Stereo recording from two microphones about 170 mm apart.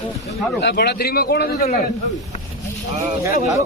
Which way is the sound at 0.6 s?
70° left (ahead or behind).